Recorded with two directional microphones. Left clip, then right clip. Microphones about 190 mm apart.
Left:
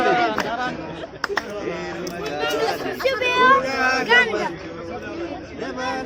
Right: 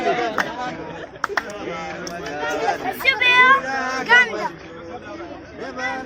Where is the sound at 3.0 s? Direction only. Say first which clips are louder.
Right 3 dB; 40° right (ahead or behind).